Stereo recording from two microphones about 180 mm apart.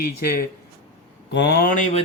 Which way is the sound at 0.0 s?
60° left (ahead or behind).